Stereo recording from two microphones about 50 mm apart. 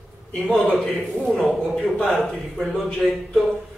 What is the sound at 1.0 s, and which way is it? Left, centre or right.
A man's voice, centre.